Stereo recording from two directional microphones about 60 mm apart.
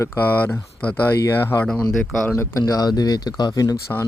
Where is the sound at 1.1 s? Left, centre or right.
Left.